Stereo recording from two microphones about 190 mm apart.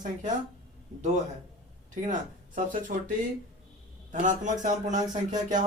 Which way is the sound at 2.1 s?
45° right (ahead or behind).